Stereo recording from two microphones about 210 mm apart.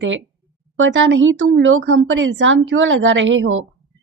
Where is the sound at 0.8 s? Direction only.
60° right (ahead or behind).